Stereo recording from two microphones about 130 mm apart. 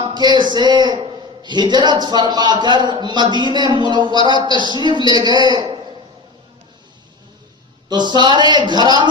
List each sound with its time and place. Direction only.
0.0 s a man's voice: 35° right (ahead or behind)
7.9 s a man's voice: 35° right (ahead or behind)